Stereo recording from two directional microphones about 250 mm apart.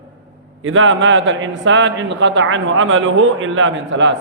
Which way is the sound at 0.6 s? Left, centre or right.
Right.